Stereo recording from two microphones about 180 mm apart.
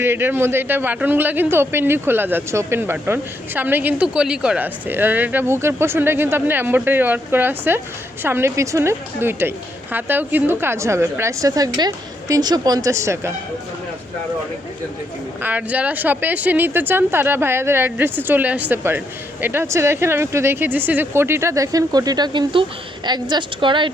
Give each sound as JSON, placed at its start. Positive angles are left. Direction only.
{"t": 0.0, "sound": "speech", "side_deg": -10}
{"t": 15.4, "sound": "a woman's voice", "side_deg": -10}